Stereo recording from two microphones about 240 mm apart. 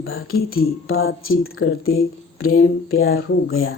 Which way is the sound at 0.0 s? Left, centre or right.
Left.